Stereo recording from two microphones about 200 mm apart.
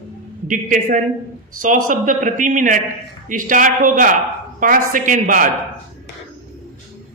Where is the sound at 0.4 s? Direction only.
40° right (ahead or behind).